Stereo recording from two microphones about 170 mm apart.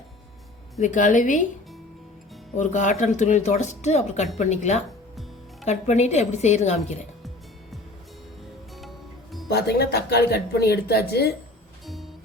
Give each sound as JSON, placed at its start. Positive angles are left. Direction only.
{"t": 0.8, "sound": "speech", "side_deg": 50}
{"t": 2.6, "sound": "speech", "side_deg": 45}
{"t": 9.5, "sound": "speech", "side_deg": 70}
{"t": 11.9, "sound": "music", "side_deg": 0}